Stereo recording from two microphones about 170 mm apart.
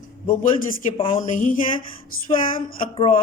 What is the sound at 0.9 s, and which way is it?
Speech, 35° left (ahead or behind).